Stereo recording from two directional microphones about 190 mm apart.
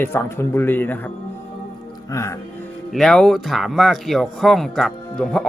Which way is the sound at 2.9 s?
5° left (ahead or behind).